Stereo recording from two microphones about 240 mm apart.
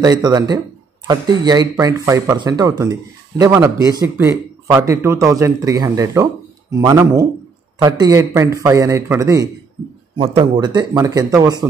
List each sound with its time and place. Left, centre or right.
0.0 s speech: centre